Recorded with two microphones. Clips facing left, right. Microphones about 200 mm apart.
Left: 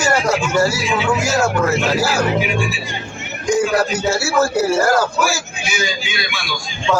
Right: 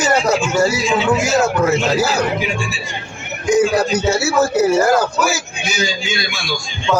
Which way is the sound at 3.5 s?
20° right (ahead or behind).